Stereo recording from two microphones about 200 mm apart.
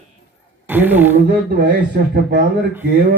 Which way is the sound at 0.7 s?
10° right (ahead or behind).